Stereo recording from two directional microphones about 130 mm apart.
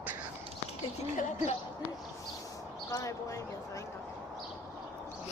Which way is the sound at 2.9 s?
25° left (ahead or behind).